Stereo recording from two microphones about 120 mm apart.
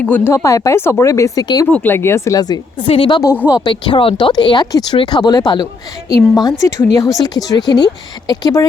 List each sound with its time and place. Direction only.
0.0 s speech: 15° left (ahead or behind)
0.3 s speech: 25° left (ahead or behind)
1.6 s speech: 15° left (ahead or behind); by 2.6 s 30° left (ahead or behind)
2.7 s a woman's voice: 50° left (ahead or behind); by 8.6 s 35° left (ahead or behind)